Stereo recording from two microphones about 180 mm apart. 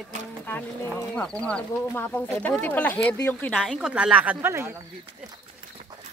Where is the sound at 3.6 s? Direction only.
5° right (ahead or behind).